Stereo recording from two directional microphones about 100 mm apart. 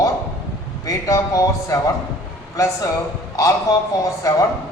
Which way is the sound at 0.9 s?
35° left (ahead or behind).